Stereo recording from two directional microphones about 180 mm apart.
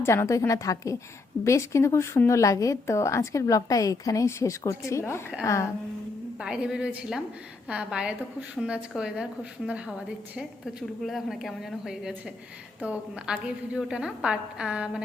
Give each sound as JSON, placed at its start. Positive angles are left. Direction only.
{"t": 0.0, "sound": "speech", "side_deg": 15}
{"t": 6.4, "sound": "a woman's voice", "side_deg": -5}